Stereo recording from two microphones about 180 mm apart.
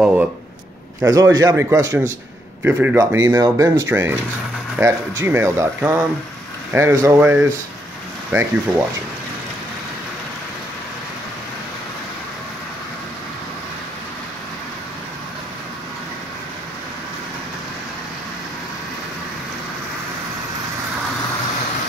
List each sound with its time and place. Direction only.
1.0 s a man's voice: 20° right (ahead or behind)